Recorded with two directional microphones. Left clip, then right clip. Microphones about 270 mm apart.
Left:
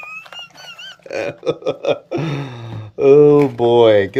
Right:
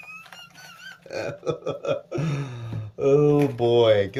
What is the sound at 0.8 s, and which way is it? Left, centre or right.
Burping, centre.